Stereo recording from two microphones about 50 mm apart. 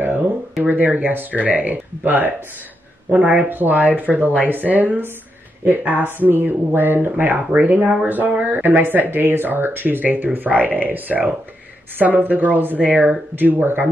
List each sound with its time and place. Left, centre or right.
0.7 s speech: right